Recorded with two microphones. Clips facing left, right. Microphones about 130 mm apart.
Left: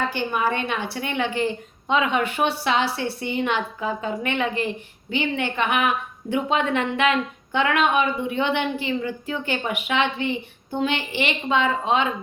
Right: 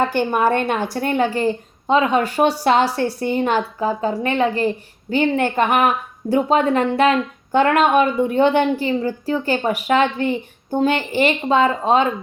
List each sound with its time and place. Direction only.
0.1 s a woman's voice: 50° right (ahead or behind)